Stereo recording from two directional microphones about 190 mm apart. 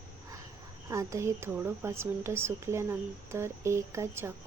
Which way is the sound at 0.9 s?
15° right (ahead or behind).